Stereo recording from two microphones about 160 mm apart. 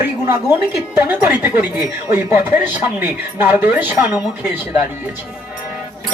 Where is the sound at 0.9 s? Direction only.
10° right (ahead or behind).